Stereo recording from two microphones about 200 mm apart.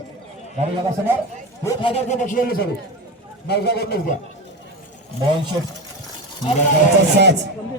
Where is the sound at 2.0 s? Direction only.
40° left (ahead or behind).